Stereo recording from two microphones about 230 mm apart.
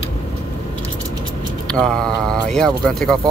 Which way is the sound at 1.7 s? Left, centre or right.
Centre.